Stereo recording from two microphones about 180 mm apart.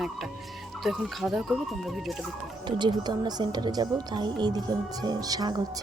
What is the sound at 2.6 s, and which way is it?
Speech, 25° right (ahead or behind).